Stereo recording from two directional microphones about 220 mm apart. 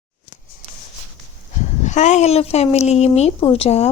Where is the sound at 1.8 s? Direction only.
30° left (ahead or behind).